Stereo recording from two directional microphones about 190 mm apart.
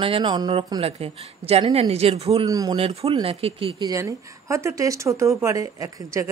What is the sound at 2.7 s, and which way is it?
A woman's voice, 30° right (ahead or behind).